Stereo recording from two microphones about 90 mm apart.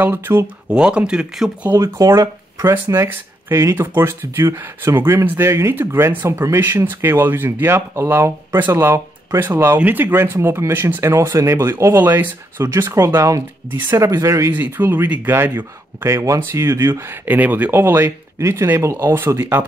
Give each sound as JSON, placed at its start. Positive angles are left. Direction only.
{"t": 0.0, "sound": "speech", "side_deg": -25}
{"t": 0.7, "sound": "speech", "side_deg": -10}
{"t": 1.7, "sound": "speech", "side_deg": -25}
{"t": 2.0, "sound": "speech", "side_deg": -40}
{"t": 3.0, "sound": "speech", "side_deg": -30}
{"t": 11.2, "sound": "speech", "side_deg": -40}
{"t": 11.5, "sound": "speech", "side_deg": -30}
{"t": 14.5, "sound": "speech", "side_deg": -20}
{"t": 17.3, "sound": "speech", "side_deg": -20}